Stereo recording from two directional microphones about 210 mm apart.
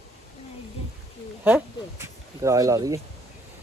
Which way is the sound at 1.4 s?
10° right (ahead or behind).